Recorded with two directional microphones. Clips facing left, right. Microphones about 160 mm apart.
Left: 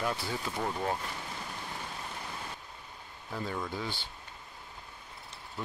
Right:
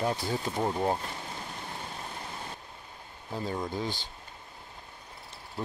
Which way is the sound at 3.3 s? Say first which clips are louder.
Right 3 dB; 35° right (ahead or behind).